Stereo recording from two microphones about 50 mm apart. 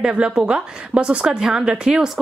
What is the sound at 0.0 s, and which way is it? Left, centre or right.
Speech, centre.